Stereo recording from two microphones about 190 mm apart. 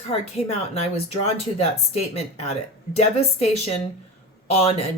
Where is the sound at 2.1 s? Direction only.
35° left (ahead or behind).